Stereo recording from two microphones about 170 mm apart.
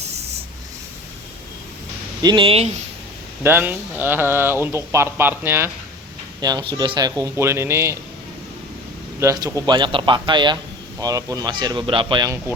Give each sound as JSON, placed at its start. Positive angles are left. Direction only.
{"t": 2.2, "sound": "speech", "side_deg": -30}
{"t": 3.4, "sound": "speech", "side_deg": -10}
{"t": 6.4, "sound": "speech", "side_deg": -25}
{"t": 9.2, "sound": "speech", "side_deg": -20}